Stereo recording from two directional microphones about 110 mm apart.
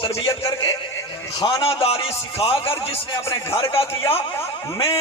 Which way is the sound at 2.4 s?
60° left (ahead or behind).